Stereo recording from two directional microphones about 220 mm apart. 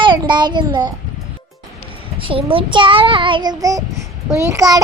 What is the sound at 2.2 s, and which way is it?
A child's voice, 25° right (ahead or behind).